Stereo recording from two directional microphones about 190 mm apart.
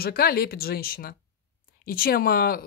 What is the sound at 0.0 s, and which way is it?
Speech, 50° left (ahead or behind).